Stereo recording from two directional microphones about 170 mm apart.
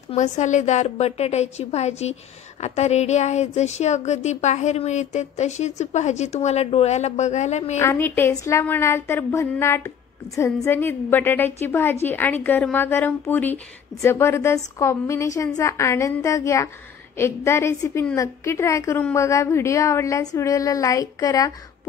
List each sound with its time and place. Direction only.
0.1 s speech: 45° left (ahead or behind)
7.8 s a woman's voice: 15° left (ahead or behind)